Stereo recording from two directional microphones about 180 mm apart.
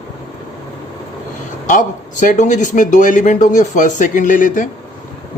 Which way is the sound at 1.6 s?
45° left (ahead or behind).